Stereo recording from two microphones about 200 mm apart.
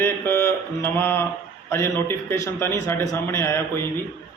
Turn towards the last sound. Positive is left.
turn(degrees=10)  # may be behind; listen again after turning